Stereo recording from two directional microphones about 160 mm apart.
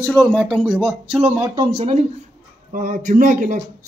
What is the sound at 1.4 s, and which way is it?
Speech, 25° right (ahead or behind).